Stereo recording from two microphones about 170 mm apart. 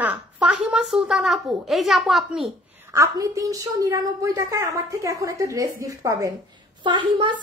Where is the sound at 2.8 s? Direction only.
20° right (ahead or behind).